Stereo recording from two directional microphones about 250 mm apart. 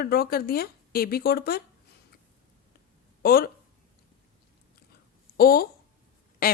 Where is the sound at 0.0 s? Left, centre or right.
Left.